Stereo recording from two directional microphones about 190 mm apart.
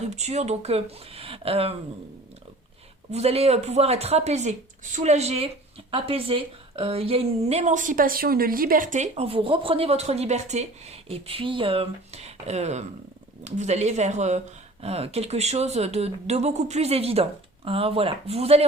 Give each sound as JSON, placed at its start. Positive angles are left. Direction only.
{"t": 0.1, "sound": "a woman's voice", "side_deg": -35}
{"t": 3.1, "sound": "a woman's voice", "side_deg": -35}